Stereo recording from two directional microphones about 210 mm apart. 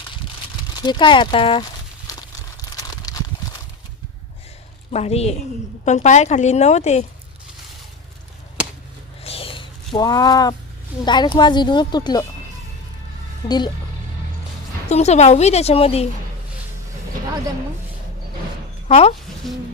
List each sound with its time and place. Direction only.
0.8 s speech: 20° left (ahead or behind)
2.8 s a sound: 15° left (ahead or behind)
4.9 s speech: 30° left (ahead or behind)
9.2 s a sound: 25° left (ahead or behind)
11.0 s speech: 20° left (ahead or behind)
13.5 s speech: 20° left (ahead or behind)
14.8 s speech: 30° left (ahead or behind)
18.9 s speech: 30° left (ahead or behind)